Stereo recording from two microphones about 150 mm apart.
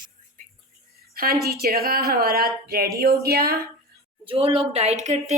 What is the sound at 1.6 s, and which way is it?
Speech, 90° right.